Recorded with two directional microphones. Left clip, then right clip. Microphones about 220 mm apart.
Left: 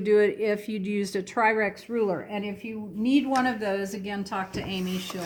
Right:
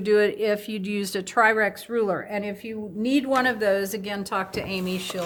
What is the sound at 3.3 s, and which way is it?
A woman's voice, 20° right (ahead or behind).